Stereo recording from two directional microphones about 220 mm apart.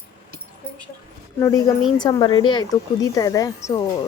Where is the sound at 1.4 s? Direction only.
15° left (ahead or behind).